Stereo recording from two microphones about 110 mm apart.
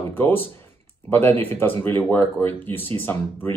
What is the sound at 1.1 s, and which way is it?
Speech, 20° left (ahead or behind).